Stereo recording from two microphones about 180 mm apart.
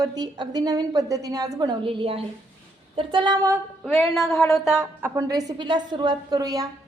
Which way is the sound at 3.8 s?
Centre (ahead or behind).